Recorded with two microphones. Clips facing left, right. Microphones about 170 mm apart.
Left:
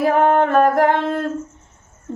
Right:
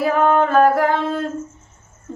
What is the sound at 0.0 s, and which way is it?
Singing, 60° left (ahead or behind).